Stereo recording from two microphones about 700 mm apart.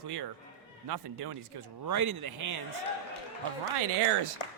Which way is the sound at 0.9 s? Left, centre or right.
Right.